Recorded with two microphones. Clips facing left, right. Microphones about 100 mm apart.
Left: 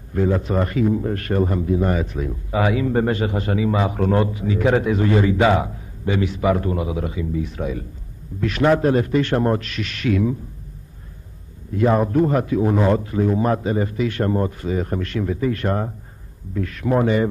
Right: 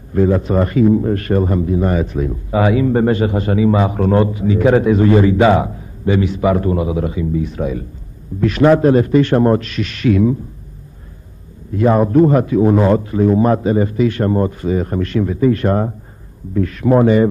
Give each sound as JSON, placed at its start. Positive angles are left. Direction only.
{"t": 0.1, "sound": "a man's voice", "side_deg": -25}
{"t": 11.8, "sound": "a man's voice", "side_deg": -25}